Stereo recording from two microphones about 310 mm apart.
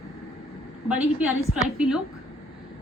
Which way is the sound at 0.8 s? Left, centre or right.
Centre.